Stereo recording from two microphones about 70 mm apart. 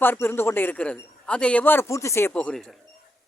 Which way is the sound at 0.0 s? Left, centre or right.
Left.